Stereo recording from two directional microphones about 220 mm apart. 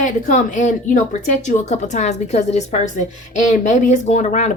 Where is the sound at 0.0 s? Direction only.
35° left (ahead or behind).